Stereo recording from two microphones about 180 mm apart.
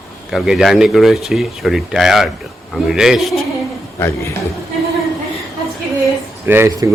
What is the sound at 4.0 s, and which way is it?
Speech, 15° left (ahead or behind).